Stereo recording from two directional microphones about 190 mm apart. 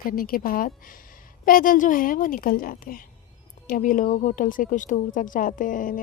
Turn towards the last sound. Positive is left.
turn(degrees=45)  # may be behind; listen again after turning